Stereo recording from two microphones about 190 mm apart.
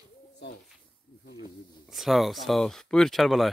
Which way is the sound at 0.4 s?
65° left (ahead or behind).